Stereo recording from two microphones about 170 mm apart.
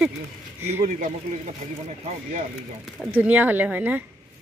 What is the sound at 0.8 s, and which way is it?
Speech, 50° right (ahead or behind).